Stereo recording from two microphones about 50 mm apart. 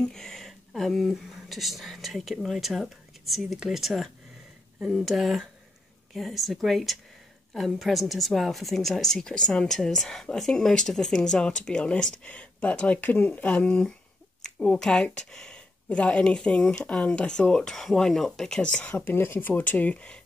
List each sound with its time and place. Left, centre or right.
0.1 s a woman's voice: centre; by 13.5 s left
13.5 s speech: left
18.8 s speech: left
19.1 s speech: left
19.9 s speech: left